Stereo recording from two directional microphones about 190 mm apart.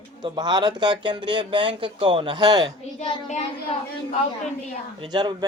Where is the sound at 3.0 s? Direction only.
25° left (ahead or behind).